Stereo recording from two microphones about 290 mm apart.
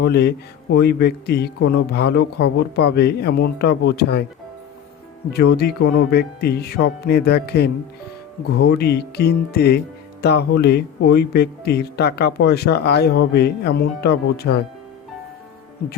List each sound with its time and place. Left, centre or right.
0.0 s speech: left
5.4 s speech: left